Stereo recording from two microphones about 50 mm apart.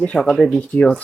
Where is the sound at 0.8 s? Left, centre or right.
Centre.